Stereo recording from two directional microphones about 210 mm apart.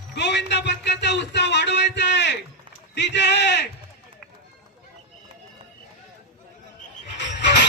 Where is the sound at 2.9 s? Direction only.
55° left (ahead or behind).